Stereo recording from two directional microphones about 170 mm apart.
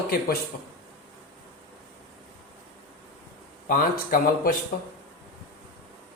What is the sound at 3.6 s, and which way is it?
Speech, 55° left (ahead or behind).